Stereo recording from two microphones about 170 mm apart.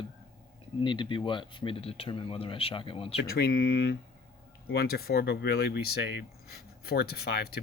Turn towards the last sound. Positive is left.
turn(degrees=70)  # may be behind; listen again after turning